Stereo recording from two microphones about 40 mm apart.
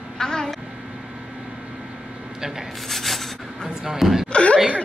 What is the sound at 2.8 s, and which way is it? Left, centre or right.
Rub, centre.